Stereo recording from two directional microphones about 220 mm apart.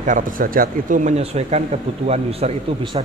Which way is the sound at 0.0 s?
35° right (ahead or behind).